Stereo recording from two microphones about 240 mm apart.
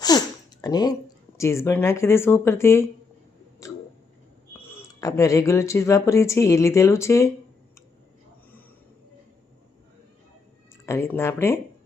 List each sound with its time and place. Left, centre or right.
0.1 s speech: centre
3.6 s a sound: centre
4.5 s speech: centre
10.8 s speech: centre